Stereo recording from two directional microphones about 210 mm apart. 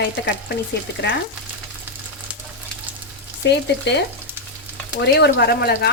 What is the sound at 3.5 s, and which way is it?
Speech, 55° left (ahead or behind).